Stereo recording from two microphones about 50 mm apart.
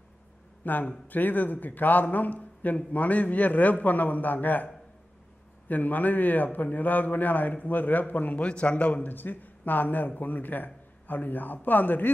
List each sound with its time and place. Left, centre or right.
0.7 s a man's voice: left
5.7 s a man's voice: left